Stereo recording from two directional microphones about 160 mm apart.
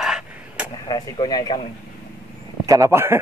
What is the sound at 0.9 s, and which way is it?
Speech, 25° left (ahead or behind).